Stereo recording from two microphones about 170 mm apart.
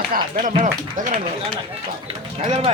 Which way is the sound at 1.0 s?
50° right (ahead or behind).